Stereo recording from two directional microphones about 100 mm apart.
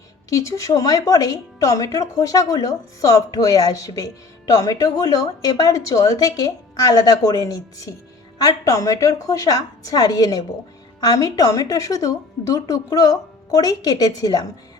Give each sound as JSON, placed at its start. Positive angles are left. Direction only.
{"t": 0.3, "sound": "a woman's voice", "side_deg": 30}